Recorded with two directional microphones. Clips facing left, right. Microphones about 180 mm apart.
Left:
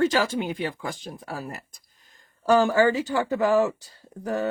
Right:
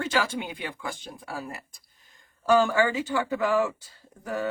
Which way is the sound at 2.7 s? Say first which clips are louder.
Left 4 dB; 40° left (ahead or behind).